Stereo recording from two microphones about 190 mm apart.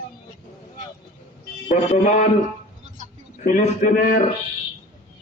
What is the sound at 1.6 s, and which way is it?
Speech, 40° left (ahead or behind).